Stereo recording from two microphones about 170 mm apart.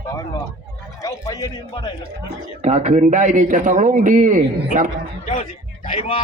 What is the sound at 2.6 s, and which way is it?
A man's voice, 40° right (ahead or behind).